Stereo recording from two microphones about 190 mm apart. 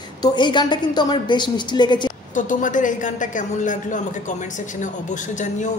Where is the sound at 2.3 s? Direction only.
45° left (ahead or behind).